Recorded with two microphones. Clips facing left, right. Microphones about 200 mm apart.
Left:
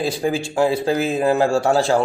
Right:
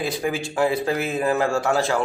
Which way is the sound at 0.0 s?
30° left (ahead or behind).